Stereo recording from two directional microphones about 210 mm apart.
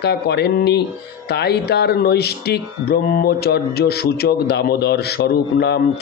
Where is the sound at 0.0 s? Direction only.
50° left (ahead or behind).